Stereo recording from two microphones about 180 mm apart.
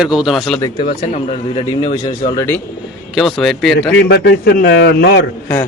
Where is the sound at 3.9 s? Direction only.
70° left (ahead or behind).